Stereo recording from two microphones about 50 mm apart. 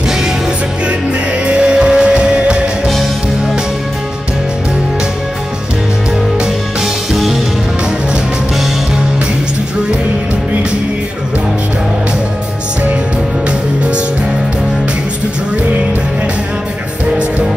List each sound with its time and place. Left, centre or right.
1.5 s music: centre